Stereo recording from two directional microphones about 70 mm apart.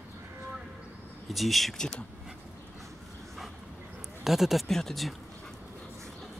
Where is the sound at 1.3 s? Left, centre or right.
Centre.